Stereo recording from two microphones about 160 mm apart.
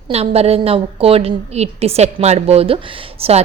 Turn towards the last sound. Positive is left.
turn(degrees=-40)  # may be behind; listen again after turning